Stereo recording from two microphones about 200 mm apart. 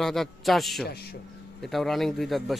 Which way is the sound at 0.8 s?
50° left (ahead or behind).